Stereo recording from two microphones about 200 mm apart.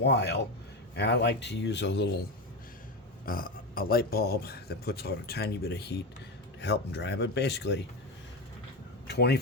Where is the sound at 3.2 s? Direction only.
45° left (ahead or behind).